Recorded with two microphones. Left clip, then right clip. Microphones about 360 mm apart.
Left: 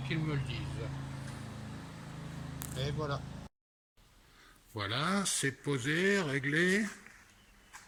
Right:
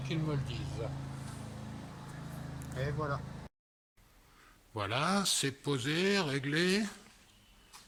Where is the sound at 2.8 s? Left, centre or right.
Centre.